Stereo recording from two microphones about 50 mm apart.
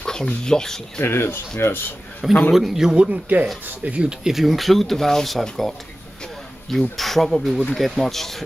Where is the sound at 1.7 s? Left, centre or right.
Left.